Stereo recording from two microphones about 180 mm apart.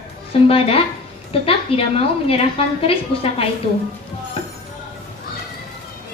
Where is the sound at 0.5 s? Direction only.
30° left (ahead or behind).